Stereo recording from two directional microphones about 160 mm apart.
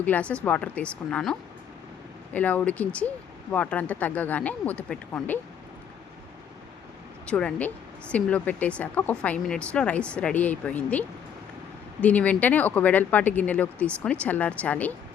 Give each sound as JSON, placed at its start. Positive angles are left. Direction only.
{"t": 0.0, "sound": "speech", "side_deg": 10}
{"t": 7.3, "sound": "speech", "side_deg": 5}